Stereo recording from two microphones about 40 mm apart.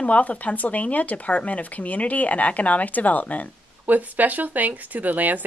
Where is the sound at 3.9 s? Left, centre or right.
Right.